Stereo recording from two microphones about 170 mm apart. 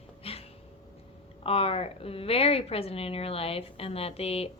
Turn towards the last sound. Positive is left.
turn(degrees=35)  # may be behind; listen again after turning